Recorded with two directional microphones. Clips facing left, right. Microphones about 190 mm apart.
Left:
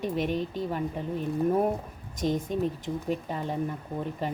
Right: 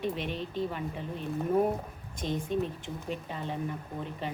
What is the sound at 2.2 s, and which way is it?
Speech, 45° left (ahead or behind).